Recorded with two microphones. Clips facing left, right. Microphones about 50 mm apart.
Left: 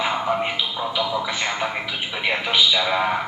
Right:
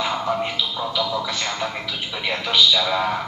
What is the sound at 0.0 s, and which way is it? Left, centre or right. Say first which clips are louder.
A man's voice: left 1 dB; left.